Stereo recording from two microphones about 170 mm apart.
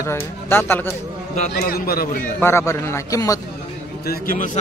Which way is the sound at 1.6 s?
60° left (ahead or behind).